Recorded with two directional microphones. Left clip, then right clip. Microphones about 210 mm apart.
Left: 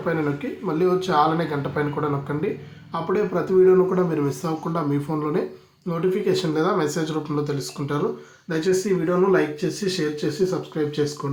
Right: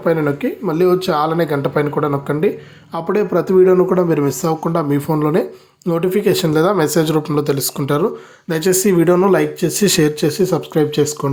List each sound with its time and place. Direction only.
0.6 s speech: 35° right (ahead or behind)